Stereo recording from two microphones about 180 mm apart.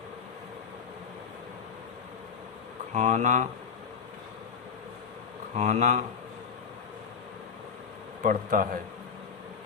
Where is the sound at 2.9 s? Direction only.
40° right (ahead or behind).